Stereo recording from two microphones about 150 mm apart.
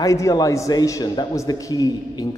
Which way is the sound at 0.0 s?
20° left (ahead or behind).